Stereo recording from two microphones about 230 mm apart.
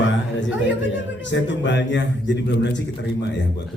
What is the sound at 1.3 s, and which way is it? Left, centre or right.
A man's voice, left.